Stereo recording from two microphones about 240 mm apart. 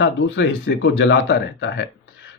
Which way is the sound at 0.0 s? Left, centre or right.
Left.